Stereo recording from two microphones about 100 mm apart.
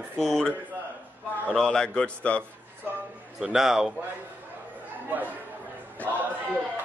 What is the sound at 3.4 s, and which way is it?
Music, 5° right (ahead or behind).